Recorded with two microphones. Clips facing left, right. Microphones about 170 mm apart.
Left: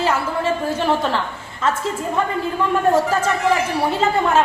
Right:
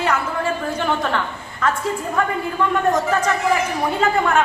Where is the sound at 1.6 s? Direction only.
25° left (ahead or behind).